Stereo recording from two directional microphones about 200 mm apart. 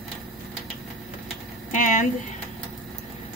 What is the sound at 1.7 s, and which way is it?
Speech, 40° left (ahead or behind).